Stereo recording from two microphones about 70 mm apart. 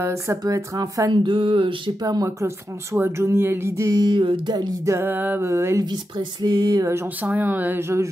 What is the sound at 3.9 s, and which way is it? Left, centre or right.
Speech, right.